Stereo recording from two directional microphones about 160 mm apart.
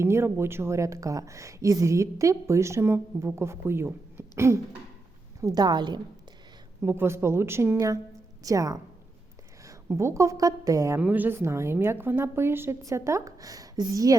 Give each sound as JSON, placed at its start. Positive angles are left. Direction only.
{"t": 0.0, "sound": "a woman's voice", "side_deg": -15}
{"t": 6.8, "sound": "a woman's voice", "side_deg": -15}